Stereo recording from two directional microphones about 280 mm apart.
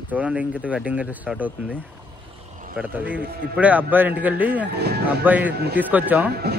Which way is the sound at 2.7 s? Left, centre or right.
Centre.